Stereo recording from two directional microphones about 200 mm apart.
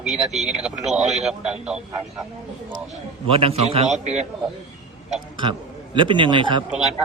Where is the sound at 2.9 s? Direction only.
30° right (ahead or behind).